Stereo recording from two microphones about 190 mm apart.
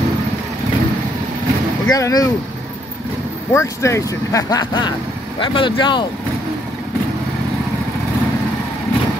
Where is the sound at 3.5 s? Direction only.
15° left (ahead or behind).